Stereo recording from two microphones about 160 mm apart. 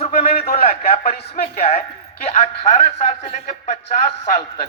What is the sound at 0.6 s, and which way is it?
Speech, 40° left (ahead or behind).